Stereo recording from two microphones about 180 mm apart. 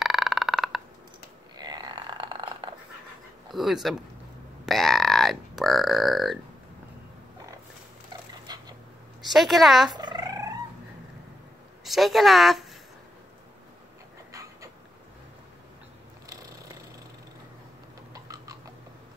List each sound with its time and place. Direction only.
0.0 s a sound: centre (ahead or behind)
1.6 s a sound: 25° right (ahead or behind)
3.5 s a woman's voice: centre (ahead or behind)
8.1 s dog: 20° right (ahead or behind)
9.3 s a woman's voice: centre (ahead or behind)
9.8 s fowl: 25° right (ahead or behind)
11.8 s speech: centre (ahead or behind)
16.3 s purr: 20° right (ahead or behind)
18.1 s a sound: 20° right (ahead or behind)